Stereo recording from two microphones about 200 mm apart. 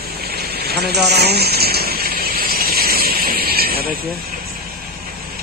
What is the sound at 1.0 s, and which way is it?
Gush, 55° right (ahead or behind).